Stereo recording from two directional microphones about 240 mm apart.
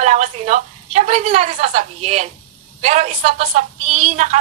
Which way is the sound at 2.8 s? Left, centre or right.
Right.